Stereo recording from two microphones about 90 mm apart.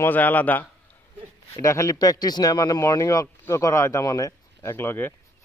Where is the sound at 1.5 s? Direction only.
35° left (ahead or behind).